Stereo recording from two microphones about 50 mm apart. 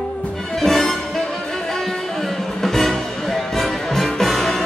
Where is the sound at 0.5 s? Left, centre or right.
Centre.